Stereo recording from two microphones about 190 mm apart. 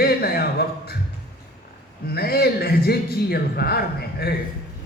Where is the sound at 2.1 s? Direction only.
55° left (ahead or behind).